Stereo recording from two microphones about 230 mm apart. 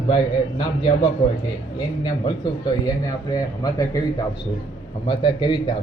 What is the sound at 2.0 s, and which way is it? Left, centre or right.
Speech, centre.